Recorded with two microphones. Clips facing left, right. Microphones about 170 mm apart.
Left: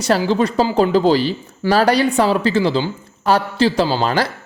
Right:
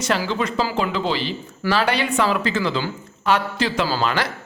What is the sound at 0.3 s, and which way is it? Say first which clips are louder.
Speech: left 6 dB; 35° left (ahead or behind).